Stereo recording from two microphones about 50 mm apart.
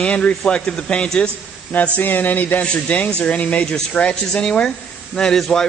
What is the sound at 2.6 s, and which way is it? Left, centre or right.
A man's voice, left.